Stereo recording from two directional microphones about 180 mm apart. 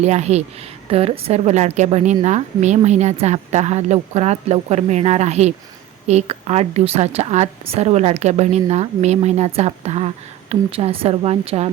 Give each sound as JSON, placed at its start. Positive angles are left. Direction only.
{"t": 0.0, "sound": "a woman's voice", "side_deg": -40}